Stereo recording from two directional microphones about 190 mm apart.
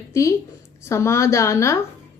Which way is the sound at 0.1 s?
15° left (ahead or behind).